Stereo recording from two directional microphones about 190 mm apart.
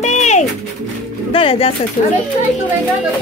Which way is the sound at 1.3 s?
30° left (ahead or behind).